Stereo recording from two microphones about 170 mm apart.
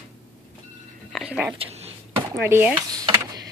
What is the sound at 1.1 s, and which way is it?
A woman's voice, 5° right (ahead or behind).